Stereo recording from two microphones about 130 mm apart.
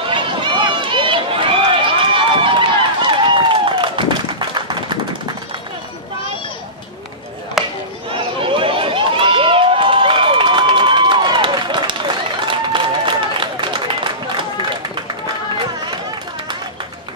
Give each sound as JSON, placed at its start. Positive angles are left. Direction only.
{"t": 0.1, "sound": "run", "side_deg": -40}
{"t": 3.1, "sound": "clapping", "side_deg": -40}
{"t": 7.6, "sound": "chop", "side_deg": 0}
{"t": 8.4, "sound": "crowd", "side_deg": -40}